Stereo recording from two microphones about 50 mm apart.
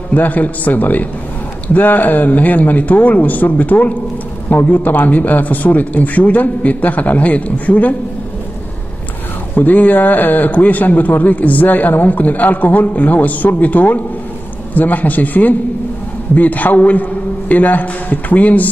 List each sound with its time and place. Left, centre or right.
0.1 s a man's voice: left
9.6 s a man's voice: left